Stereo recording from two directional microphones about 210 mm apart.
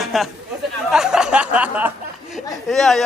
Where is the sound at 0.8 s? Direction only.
5° right (ahead or behind).